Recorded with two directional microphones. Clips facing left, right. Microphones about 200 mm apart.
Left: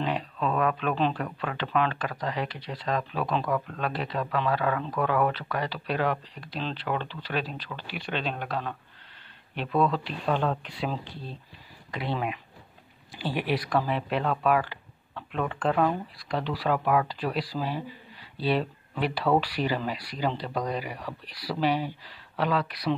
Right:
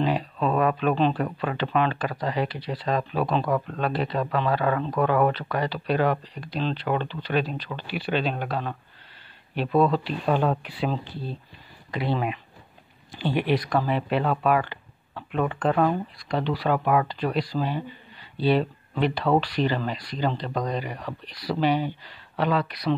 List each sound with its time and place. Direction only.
0.6 s speech: 5° right (ahead or behind)
3.4 s speech: 25° right (ahead or behind)
3.8 s speech: centre (ahead or behind)